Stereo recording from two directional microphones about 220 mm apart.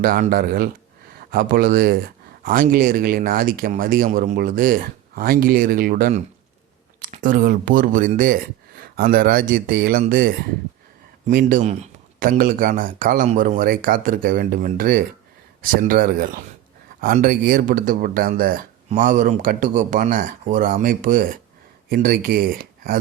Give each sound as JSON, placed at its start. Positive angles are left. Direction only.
{"t": 0.0, "sound": "speech", "side_deg": -40}